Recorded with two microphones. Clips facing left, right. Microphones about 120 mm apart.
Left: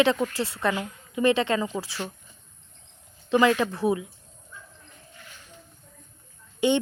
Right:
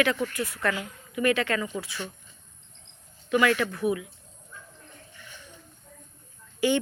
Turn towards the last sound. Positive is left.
turn(degrees=25)  # may be behind; listen again after turning